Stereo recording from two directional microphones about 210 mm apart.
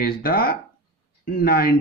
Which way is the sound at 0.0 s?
45° left (ahead or behind).